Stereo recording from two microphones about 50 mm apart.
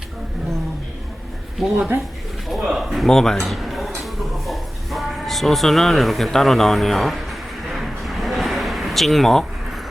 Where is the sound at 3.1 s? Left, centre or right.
Centre.